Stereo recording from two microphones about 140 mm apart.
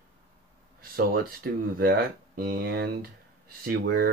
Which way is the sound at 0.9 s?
90° right.